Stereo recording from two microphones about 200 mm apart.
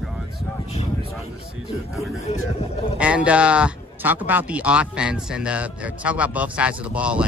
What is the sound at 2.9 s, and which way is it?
Speech, 5° right (ahead or behind).